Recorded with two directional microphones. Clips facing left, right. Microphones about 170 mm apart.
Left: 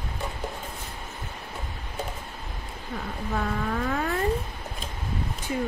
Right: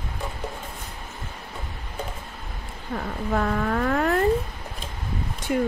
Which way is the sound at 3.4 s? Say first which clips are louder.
Right 4 dB; 60° right (ahead or behind).